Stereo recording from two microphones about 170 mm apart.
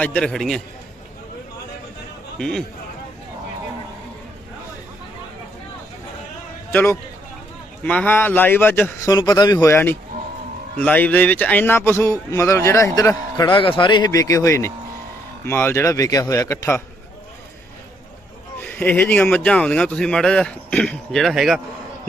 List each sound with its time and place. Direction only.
0.0 s a man's voice: 5° left (ahead or behind)
2.4 s a man's voice: 5° left (ahead or behind)
6.7 s a man's voice: 15° left (ahead or behind)
18.6 s speech: 10° left (ahead or behind)